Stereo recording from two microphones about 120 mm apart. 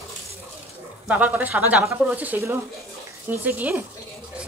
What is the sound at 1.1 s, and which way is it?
Speech, 15° right (ahead or behind).